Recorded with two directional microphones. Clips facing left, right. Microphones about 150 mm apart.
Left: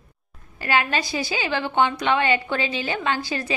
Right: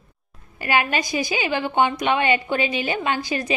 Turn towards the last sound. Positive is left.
turn(degrees=-15)  # may be behind; listen again after turning